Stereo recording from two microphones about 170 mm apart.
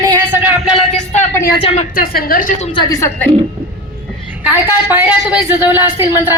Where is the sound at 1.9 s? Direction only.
60° left (ahead or behind).